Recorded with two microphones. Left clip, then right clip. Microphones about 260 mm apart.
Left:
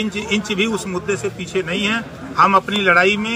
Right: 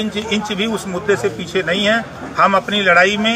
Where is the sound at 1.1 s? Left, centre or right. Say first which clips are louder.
Right 9 dB; centre.